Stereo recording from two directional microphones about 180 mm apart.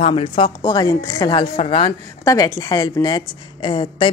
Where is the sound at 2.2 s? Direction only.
20° left (ahead or behind).